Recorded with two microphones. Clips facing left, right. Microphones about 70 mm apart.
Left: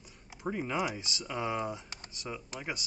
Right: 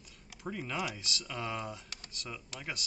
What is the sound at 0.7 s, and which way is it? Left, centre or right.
Speech, centre.